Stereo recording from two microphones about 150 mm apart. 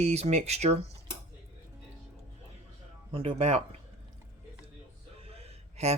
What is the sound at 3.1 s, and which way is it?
Speech, 40° right (ahead or behind).